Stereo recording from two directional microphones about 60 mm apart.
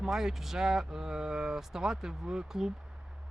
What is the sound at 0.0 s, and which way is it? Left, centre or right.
Speech, centre.